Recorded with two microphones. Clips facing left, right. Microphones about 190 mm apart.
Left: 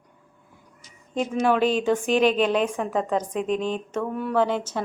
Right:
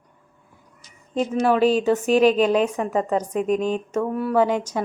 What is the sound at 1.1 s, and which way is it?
A woman's voice, centre (ahead or behind).